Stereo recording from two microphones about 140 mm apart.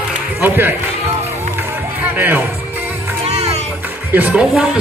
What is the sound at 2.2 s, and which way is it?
Speech, 15° right (ahead or behind).